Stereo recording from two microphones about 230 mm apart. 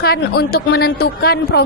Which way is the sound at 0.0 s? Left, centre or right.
Left.